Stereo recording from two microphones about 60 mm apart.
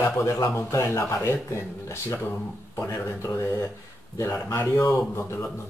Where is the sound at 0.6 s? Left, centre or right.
Left.